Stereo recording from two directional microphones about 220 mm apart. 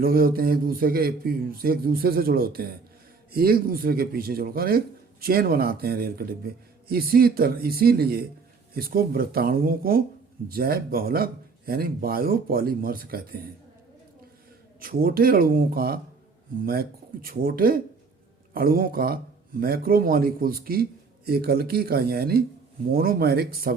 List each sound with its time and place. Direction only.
0.0 s a man's voice: 40° right (ahead or behind)
14.8 s a man's voice: 40° right (ahead or behind)